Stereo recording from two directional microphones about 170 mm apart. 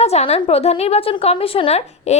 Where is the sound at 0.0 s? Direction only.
40° left (ahead or behind).